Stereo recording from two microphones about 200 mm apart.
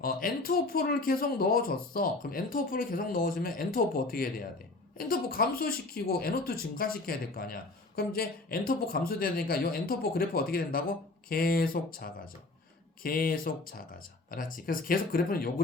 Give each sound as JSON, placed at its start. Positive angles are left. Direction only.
{"t": 0.0, "sound": "speech", "side_deg": 45}